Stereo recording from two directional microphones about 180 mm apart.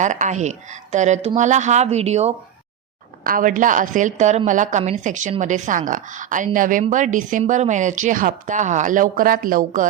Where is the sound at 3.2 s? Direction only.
50° right (ahead or behind).